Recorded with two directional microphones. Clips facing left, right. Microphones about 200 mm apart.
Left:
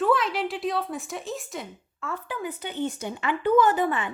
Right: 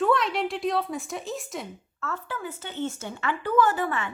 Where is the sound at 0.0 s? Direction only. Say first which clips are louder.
Even; centre (ahead or behind).